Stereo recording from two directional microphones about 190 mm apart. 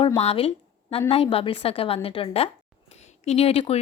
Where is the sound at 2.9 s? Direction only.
35° left (ahead or behind).